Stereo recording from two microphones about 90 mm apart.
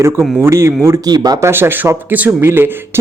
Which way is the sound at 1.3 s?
30° right (ahead or behind).